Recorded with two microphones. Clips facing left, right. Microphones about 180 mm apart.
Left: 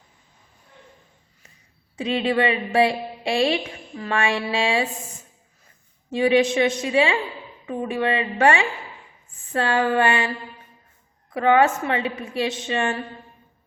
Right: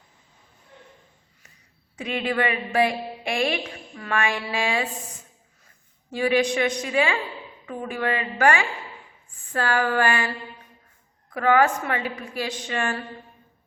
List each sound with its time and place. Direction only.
2.0 s a woman's voice: 30° left (ahead or behind)
6.1 s a woman's voice: 25° left (ahead or behind)
11.3 s a woman's voice: 25° left (ahead or behind)